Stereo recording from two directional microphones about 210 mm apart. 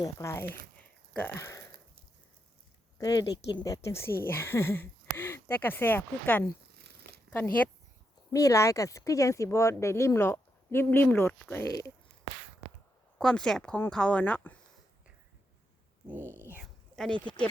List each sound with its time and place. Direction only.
0.0 s speech: 15° left (ahead or behind)
0.8 s a sound: 10° left (ahead or behind)
3.0 s speech: 20° left (ahead or behind)
6.8 s a sound: 50° right (ahead or behind)
7.3 s speech: 5° left (ahead or behind)
13.1 s a woman's voice: 5° left (ahead or behind)
16.0 s speech: 10° right (ahead or behind)
16.9 s speech: 5° left (ahead or behind)